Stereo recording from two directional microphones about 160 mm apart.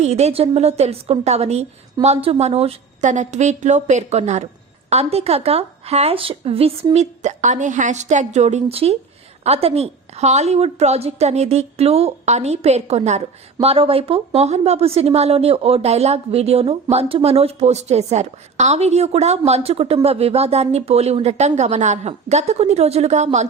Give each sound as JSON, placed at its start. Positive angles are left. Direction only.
{"t": 0.0, "sound": "a woman's voice", "side_deg": -45}